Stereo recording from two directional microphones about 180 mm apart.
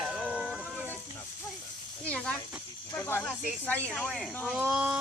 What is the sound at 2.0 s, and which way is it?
A woman's voice, 5° left (ahead or behind).